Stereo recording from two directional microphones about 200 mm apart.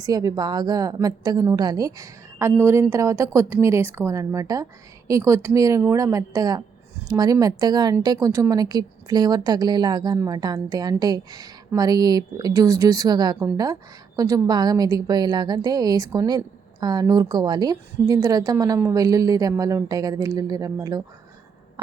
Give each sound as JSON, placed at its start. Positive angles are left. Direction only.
{"t": 0.0, "sound": "a woman's voice", "side_deg": -20}